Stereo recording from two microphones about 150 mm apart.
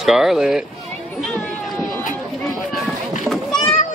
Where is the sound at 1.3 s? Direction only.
5° left (ahead or behind).